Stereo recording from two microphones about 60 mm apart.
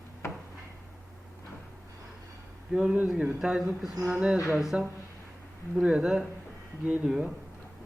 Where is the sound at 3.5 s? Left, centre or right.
Centre.